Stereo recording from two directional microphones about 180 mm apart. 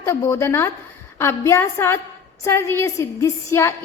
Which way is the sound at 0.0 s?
15° left (ahead or behind).